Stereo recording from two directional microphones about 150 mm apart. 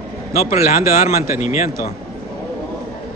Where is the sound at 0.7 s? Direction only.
70° left (ahead or behind).